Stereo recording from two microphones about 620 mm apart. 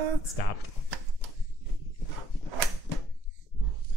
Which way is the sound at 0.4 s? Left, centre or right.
Left.